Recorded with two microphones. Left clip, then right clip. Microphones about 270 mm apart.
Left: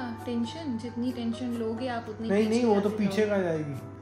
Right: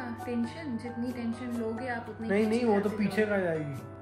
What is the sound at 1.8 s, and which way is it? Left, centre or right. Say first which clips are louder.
Speech: left 2 dB; centre.